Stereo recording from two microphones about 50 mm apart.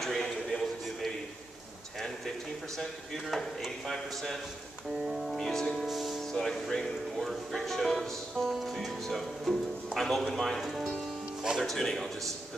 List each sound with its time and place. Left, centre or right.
0.0 s a sound: centre
2.8 s speech: centre
5.0 s speech: centre
5.4 s music: centre
6.3 s speech: centre